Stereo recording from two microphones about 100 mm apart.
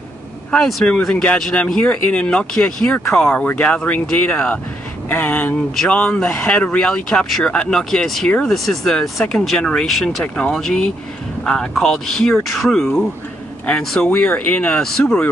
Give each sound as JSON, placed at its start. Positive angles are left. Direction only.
{"t": 0.5, "sound": "speech", "side_deg": 5}
{"t": 10.2, "sound": "speech", "side_deg": 10}